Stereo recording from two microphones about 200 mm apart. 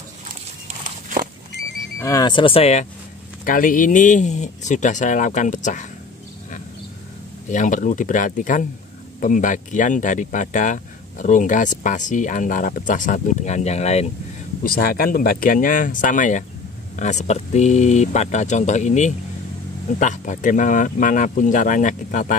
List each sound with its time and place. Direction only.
0.8 s walk: 40° right (ahead or behind)
2.0 s speech: 15° left (ahead or behind); by 5.9 s 40° left (ahead or behind)
7.5 s speech: 40° left (ahead or behind)
14.6 s speech: 45° left (ahead or behind)